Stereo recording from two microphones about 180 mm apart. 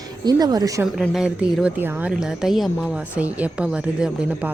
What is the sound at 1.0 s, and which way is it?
Speech, centre (ahead or behind).